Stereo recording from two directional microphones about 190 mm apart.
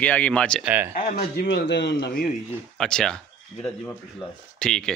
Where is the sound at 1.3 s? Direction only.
65° left (ahead or behind).